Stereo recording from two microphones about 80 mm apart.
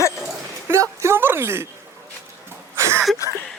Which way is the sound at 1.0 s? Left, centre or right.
Right.